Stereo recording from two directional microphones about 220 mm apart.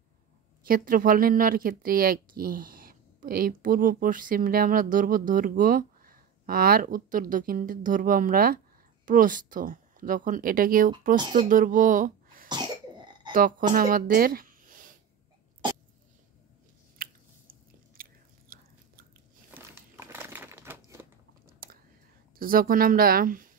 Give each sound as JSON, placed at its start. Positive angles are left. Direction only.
{"t": 0.7, "sound": "speech", "side_deg": -40}
{"t": 12.4, "sound": "cough", "side_deg": -20}
{"t": 13.3, "sound": "speech", "side_deg": -40}
{"t": 17.0, "sound": "chewing", "side_deg": -40}
{"t": 18.5, "sound": "biting", "side_deg": -40}
{"t": 19.5, "sound": "crumpling", "side_deg": -10}
{"t": 22.4, "sound": "speech", "side_deg": -40}